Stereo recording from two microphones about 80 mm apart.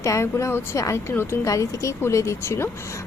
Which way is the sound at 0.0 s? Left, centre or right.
Left.